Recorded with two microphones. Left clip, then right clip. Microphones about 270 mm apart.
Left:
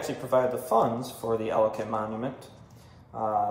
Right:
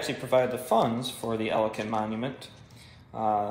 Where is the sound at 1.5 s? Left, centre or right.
Right.